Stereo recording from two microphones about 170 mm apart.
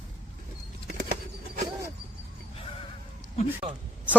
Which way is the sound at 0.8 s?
60° right (ahead or behind).